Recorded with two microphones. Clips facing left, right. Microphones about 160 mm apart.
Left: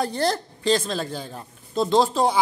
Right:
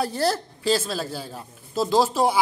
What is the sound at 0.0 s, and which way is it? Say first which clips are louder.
A woman's voice: even; 5° right (ahead or behind).